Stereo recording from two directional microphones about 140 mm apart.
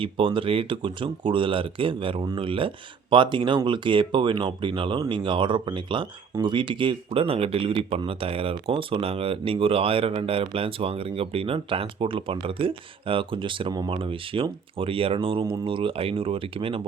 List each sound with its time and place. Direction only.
0.0 s speech: 40° right (ahead or behind)